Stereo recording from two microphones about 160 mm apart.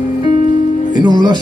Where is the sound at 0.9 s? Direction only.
25° right (ahead or behind).